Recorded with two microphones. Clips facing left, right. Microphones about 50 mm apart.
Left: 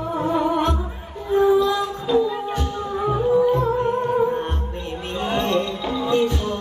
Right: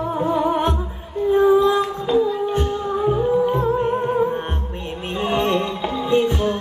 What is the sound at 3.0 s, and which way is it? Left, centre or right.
Music, centre.